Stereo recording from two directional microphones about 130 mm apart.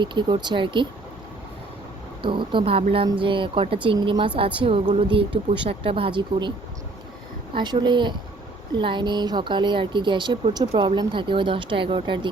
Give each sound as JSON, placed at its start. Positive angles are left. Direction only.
{"t": 0.0, "sound": "speech", "side_deg": -35}
{"t": 2.2, "sound": "a woman's voice", "side_deg": -40}
{"t": 7.5, "sound": "speech", "side_deg": -35}